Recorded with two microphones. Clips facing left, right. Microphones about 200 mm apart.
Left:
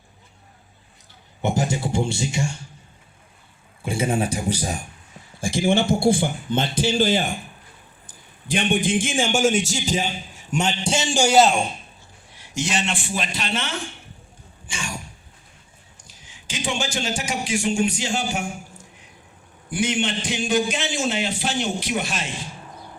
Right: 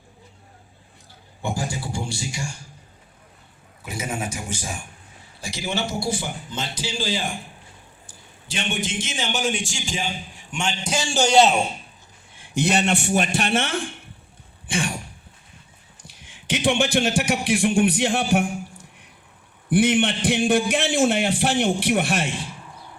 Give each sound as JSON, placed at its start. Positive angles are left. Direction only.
{"t": 1.4, "sound": "a man's voice", "side_deg": 20}
{"t": 3.8, "sound": "a man's voice", "side_deg": 30}
{"t": 5.4, "sound": "a man's voice", "side_deg": 50}
{"t": 8.4, "sound": "a man's voice", "side_deg": 55}
{"t": 10.9, "sound": "a man's voice", "side_deg": 15}
{"t": 12.4, "sound": "a man's voice", "side_deg": -55}
{"t": 16.5, "sound": "a man's voice", "side_deg": -60}
{"t": 19.7, "sound": "a man's voice", "side_deg": -60}